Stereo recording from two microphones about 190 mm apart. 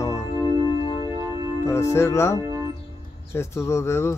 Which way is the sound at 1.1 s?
15° right (ahead or behind).